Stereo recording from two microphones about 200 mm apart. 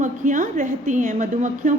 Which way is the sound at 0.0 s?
40° right (ahead or behind).